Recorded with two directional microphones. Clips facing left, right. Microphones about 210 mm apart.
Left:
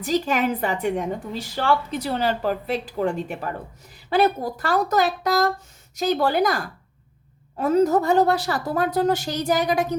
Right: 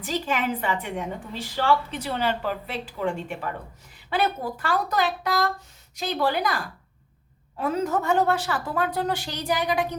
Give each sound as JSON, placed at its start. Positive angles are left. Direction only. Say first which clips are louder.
{"t": 0.0, "sound": "a woman's voice", "louder": "left 5 dB", "side_deg": 40}